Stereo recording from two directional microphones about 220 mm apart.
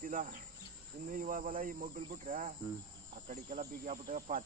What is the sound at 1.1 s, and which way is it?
Cricket, 40° right (ahead or behind).